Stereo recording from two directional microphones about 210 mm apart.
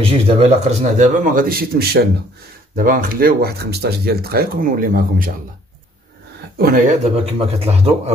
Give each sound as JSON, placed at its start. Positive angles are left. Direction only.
{"t": 0.0, "sound": "a man's voice", "side_deg": -30}
{"t": 6.6, "sound": "speech", "side_deg": -45}
{"t": 7.2, "sound": "a man's voice", "side_deg": -30}